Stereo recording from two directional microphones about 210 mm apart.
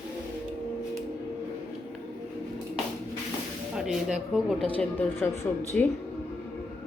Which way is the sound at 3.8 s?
5° right (ahead or behind).